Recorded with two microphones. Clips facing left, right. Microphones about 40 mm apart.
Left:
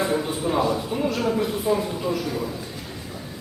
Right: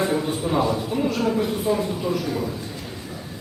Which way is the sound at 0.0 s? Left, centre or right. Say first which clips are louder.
Right 1 dB; centre.